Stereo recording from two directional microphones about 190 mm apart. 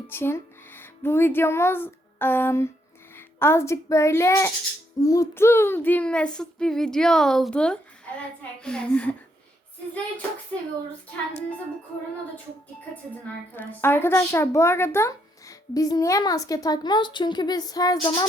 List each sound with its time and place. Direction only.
0.1 s a child's voice: 10° left (ahead or behind)
4.9 s child singing: 15° left (ahead or behind)
9.9 s speech: 10° left (ahead or behind)
13.6 s speech: 10° left (ahead or behind)